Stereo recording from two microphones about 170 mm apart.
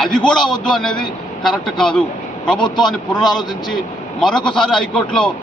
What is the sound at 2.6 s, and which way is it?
Speech, 25° left (ahead or behind).